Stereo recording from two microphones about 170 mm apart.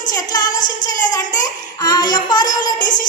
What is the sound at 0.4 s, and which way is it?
Child singing, 50° left (ahead or behind).